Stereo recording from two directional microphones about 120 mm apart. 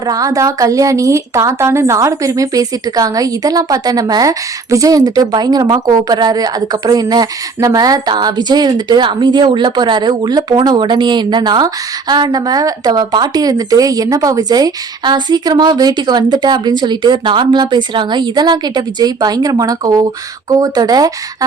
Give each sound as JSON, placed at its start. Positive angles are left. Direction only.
{"t": 0.0, "sound": "a woman's voice", "side_deg": -30}